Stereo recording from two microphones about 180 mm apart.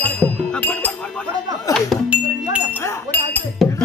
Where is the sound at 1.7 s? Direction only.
5° right (ahead or behind).